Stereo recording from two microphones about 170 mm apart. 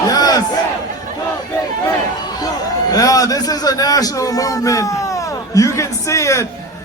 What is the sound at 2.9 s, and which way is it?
A man's voice, 20° left (ahead or behind).